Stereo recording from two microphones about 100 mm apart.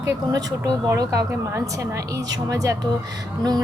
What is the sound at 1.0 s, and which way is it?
A woman's voice, 35° right (ahead or behind).